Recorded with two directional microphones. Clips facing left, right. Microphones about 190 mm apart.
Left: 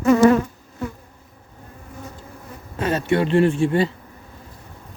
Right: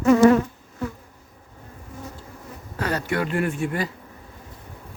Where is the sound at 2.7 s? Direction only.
25° left (ahead or behind).